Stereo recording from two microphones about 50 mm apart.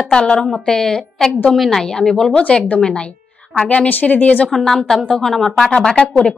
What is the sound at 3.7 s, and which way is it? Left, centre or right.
Speech, left.